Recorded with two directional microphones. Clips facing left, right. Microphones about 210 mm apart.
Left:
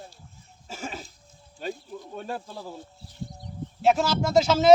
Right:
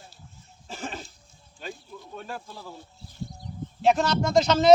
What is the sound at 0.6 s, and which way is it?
Cough, 5° left (ahead or behind).